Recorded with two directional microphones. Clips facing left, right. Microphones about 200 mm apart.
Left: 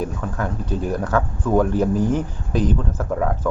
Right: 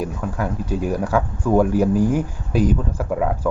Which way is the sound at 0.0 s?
10° right (ahead or behind).